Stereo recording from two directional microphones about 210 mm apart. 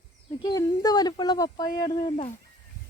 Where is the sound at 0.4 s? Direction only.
20° left (ahead or behind).